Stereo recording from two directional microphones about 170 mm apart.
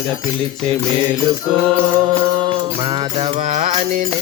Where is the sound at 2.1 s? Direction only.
30° right (ahead or behind).